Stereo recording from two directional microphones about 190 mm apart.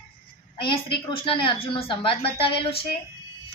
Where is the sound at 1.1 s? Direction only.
25° left (ahead or behind).